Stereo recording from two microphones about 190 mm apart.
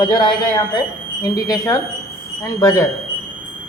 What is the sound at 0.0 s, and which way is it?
Speech, 25° left (ahead or behind).